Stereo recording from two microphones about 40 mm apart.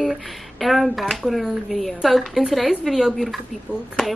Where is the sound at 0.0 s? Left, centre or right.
Centre.